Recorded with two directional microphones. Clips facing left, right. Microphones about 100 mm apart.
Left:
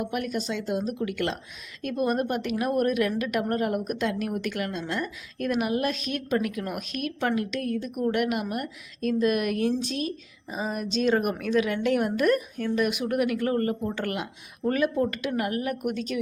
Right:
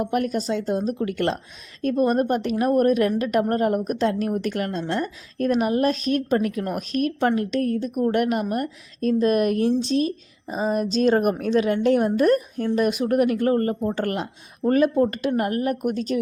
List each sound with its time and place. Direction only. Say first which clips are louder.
0.0 s a woman's voice: right 6 dB; 40° right (ahead or behind)